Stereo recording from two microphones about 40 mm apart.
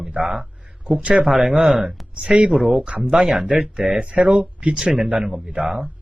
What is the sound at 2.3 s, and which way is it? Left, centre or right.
Speech, right.